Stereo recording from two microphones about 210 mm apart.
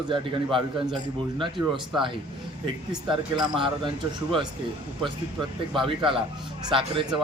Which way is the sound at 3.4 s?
20° right (ahead or behind).